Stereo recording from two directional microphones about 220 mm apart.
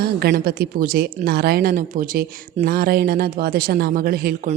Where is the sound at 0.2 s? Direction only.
45° right (ahead or behind).